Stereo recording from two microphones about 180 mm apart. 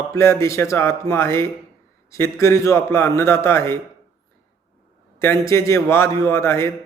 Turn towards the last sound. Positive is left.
turn(degrees=15)  # may be behind; listen again after turning